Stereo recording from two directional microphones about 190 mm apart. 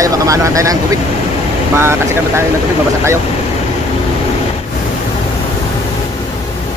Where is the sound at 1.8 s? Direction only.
15° right (ahead or behind).